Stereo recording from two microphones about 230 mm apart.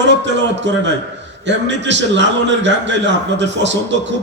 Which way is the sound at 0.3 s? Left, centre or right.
Right.